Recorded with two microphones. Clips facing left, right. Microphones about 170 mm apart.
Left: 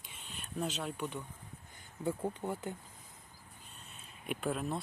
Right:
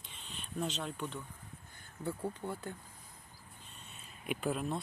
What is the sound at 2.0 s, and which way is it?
Speech, 20° left (ahead or behind).